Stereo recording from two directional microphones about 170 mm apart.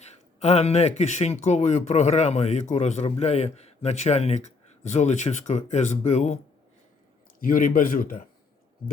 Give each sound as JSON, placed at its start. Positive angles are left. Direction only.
{"t": 0.3, "sound": "speech", "side_deg": 40}
{"t": 7.4, "sound": "a man's voice", "side_deg": 55}